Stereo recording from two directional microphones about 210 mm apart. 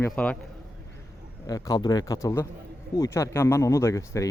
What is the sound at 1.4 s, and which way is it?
Speech, 15° left (ahead or behind).